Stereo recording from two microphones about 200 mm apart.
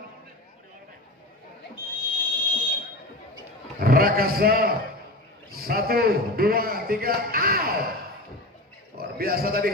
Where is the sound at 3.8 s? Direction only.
50° right (ahead or behind).